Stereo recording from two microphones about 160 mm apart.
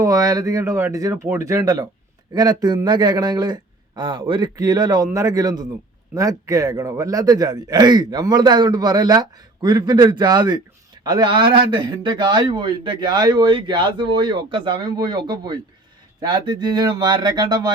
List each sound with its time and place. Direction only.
0.0 s speech: 20° right (ahead or behind)